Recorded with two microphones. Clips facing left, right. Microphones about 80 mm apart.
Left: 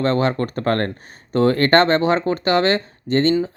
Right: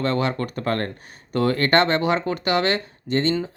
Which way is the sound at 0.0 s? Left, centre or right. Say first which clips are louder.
Left 4 dB; left.